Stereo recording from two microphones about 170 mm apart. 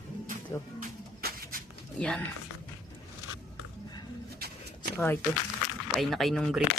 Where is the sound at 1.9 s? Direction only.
5° left (ahead or behind).